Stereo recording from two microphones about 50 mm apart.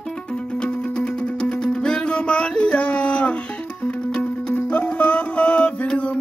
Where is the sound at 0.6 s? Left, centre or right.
Left.